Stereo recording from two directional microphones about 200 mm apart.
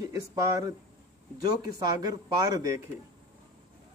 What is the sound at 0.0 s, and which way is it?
Speech, 15° right (ahead or behind).